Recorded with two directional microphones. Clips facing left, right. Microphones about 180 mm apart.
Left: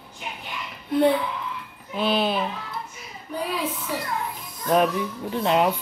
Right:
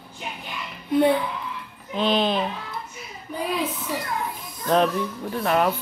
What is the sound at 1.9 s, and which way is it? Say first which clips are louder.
Speech: right 1 dB; 5° left (ahead or behind).